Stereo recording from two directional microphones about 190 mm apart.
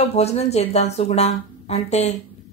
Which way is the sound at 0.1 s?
35° left (ahead or behind).